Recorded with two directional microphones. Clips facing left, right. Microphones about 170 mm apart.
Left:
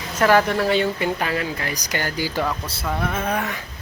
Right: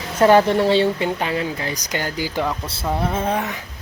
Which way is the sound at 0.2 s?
30° right (ahead or behind).